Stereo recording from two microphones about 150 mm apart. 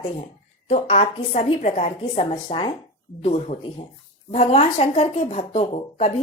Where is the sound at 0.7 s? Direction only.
45° left (ahead or behind).